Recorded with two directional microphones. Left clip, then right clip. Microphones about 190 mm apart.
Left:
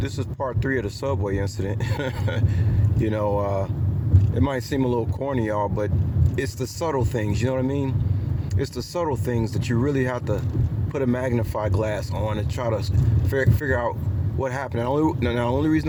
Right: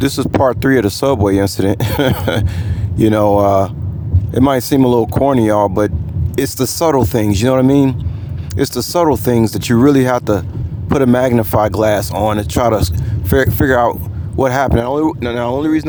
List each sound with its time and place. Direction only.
0.0 s speech: 50° right (ahead or behind)